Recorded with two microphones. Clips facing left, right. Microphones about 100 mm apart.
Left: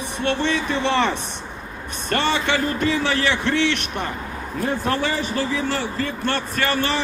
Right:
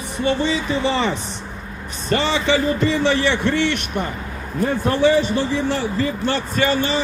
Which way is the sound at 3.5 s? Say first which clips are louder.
Right 1 dB; 65° left (ahead or behind).